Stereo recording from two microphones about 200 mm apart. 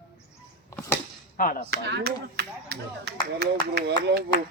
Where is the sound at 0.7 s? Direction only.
10° left (ahead or behind).